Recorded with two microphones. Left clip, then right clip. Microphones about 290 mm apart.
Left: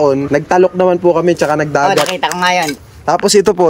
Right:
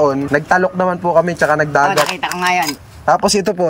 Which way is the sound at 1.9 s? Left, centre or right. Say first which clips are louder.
Left 3 dB; left.